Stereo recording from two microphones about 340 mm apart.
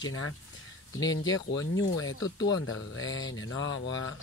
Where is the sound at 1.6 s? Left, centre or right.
Left.